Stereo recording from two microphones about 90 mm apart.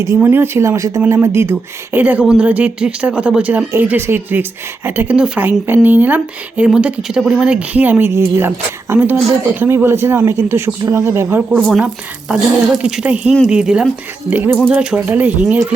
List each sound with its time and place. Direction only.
0.0 s speech: 35° right (ahead or behind); by 2.2 s 20° right (ahead or behind)
2.2 s speech: 5° right (ahead or behind)
3.8 s speech: 25° right (ahead or behind)
5.1 s speech: 10° right (ahead or behind)
5.4 s speech: 20° right (ahead or behind)
12.3 s speech: 5° right (ahead or behind)